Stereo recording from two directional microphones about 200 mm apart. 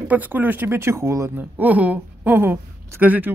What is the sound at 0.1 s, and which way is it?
Speech, 10° right (ahead or behind).